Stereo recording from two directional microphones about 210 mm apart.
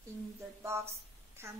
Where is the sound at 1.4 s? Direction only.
10° right (ahead or behind).